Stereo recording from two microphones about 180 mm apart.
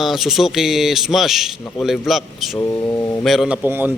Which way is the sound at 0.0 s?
Centre (ahead or behind).